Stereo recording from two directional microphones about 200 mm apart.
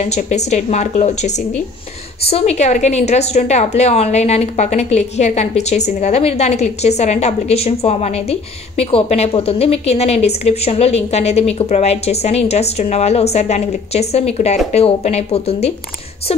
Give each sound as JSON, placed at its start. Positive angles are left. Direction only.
{"t": 0.0, "sound": "a woman's voice", "side_deg": 35}